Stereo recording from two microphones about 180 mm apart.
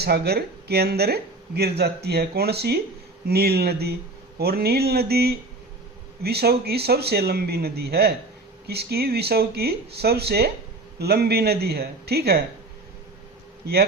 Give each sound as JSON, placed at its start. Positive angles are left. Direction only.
{"t": 0.0, "sound": "speech", "side_deg": -60}